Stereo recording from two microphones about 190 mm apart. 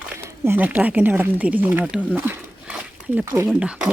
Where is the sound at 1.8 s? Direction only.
5° left (ahead or behind).